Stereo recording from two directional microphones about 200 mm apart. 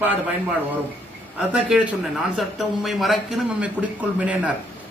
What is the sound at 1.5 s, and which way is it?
A man's voice, 5° right (ahead or behind).